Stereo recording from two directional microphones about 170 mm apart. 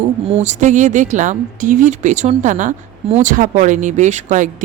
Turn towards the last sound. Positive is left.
turn(degrees=-45)  # may be behind; listen again after turning